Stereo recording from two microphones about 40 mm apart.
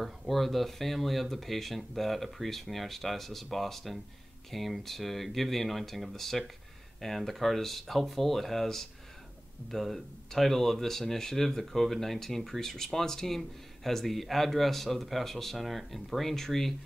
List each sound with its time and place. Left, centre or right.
0.0 s speech: centre